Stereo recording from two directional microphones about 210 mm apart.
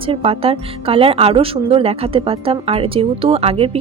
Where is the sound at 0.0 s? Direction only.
25° right (ahead or behind).